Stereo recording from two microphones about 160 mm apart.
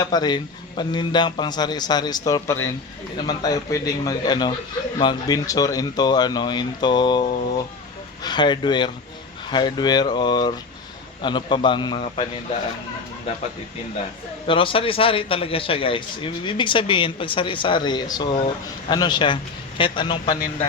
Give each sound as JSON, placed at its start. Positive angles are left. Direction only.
{"t": 0.0, "sound": "a man's voice", "side_deg": 25}
{"t": 14.4, "sound": "a man's voice", "side_deg": 35}